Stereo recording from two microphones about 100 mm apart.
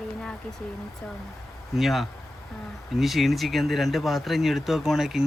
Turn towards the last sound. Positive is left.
turn(degrees=-5)  # may be behind; listen again after turning